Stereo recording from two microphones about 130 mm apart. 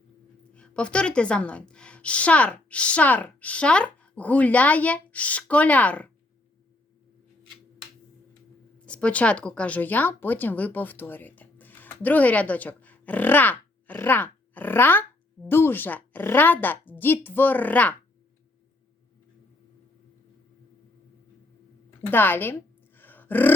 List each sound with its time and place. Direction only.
0.5 s a woman's voice: 10° left (ahead or behind)
8.9 s a woman's voice: 10° left (ahead or behind)
22.0 s a woman's voice: 15° left (ahead or behind)
23.0 s a sound: 15° left (ahead or behind)